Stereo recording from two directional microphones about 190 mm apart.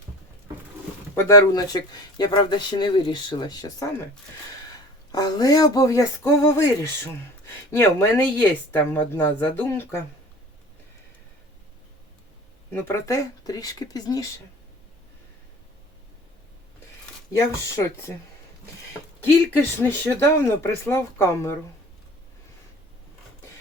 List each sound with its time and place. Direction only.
1.1 s speech: 15° left (ahead or behind)
5.1 s speech: 20° left (ahead or behind)
12.7 s speech: 15° left (ahead or behind)
19.2 s speech: 10° left (ahead or behind)